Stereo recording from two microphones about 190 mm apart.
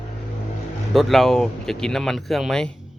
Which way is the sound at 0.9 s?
Centre (ahead or behind).